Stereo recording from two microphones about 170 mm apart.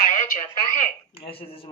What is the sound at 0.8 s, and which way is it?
Speech, 35° left (ahead or behind).